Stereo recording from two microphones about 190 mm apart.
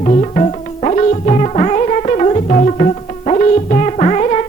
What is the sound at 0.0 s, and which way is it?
Music, 35° left (ahead or behind).